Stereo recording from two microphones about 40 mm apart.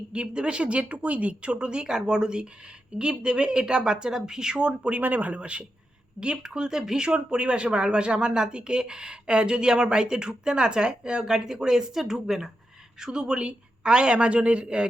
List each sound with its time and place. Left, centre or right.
0.1 s speech: right
4.9 s speech: right
5.4 s speech: right